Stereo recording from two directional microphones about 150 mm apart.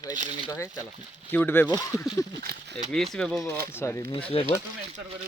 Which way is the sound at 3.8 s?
15° left (ahead or behind).